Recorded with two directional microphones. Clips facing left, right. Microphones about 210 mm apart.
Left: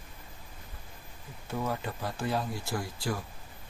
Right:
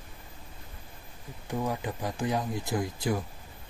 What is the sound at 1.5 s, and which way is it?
Speech, 15° right (ahead or behind).